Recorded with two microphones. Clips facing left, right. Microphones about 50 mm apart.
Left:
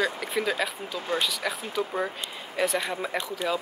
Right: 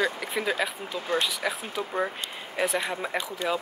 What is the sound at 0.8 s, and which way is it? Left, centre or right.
Speech, right.